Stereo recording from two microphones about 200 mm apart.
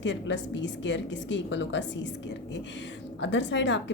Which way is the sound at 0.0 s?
65° left (ahead or behind).